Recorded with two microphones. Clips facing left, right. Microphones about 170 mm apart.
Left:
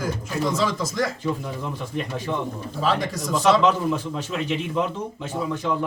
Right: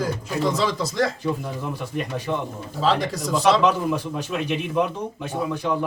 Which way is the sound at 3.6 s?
10° right (ahead or behind).